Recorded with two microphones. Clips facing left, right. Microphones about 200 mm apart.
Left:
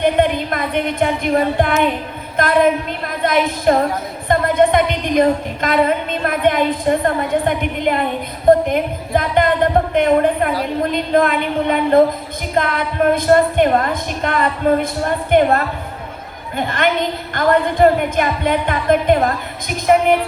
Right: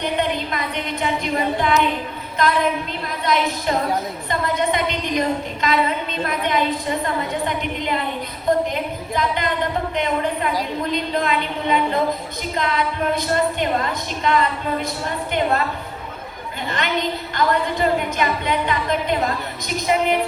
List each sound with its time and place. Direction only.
0.0 s a woman's voice: 50° left (ahead or behind)